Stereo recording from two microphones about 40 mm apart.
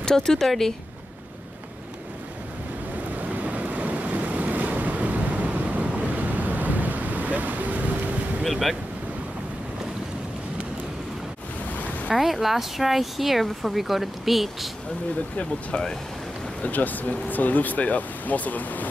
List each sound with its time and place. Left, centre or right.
0.0 s speech: centre
3.2 s waves: right
8.5 s speech: centre
12.1 s speech: centre
16.6 s speech: left